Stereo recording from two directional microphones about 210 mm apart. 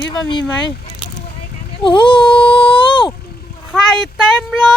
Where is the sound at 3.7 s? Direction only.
Centre (ahead or behind).